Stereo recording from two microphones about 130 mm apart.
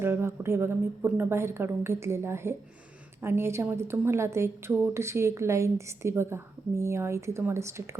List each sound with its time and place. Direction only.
0.0 s a woman's voice: 20° right (ahead or behind)